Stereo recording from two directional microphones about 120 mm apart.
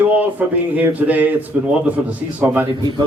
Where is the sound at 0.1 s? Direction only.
15° right (ahead or behind).